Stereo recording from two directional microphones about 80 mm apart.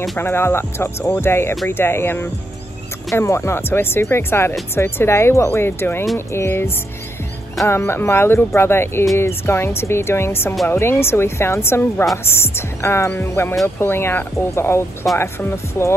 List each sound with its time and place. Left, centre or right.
0.2 s music: left
1.7 s speech: left
4.7 s music: left
6.1 s speech: left
7.6 s music: left